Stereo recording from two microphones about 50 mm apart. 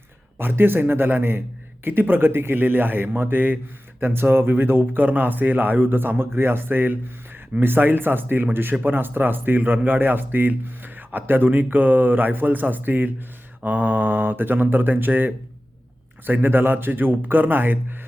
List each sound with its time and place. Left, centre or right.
0.3 s a man's voice: right